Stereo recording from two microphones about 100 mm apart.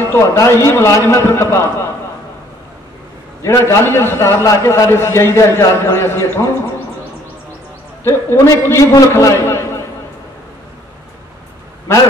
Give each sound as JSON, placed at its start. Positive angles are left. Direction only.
{"t": 0.1, "sound": "a man's voice", "side_deg": 25}
{"t": 3.4, "sound": "a man's voice", "side_deg": 25}
{"t": 8.0, "sound": "a man's voice", "side_deg": 25}